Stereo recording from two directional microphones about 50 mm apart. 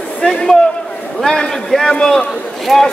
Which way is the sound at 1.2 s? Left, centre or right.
Centre.